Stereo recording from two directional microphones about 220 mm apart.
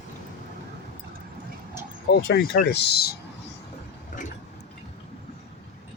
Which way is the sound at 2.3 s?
45° left (ahead or behind).